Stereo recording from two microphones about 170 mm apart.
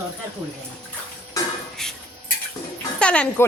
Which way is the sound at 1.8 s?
5° left (ahead or behind).